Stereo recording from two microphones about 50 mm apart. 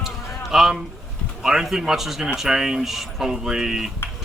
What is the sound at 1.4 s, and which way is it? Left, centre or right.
Speech, centre.